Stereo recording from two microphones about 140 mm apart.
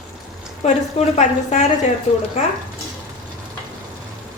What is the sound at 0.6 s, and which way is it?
A woman's voice, 60° left (ahead or behind).